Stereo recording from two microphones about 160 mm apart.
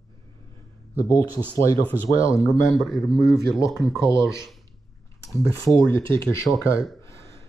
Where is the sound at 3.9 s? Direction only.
20° left (ahead or behind).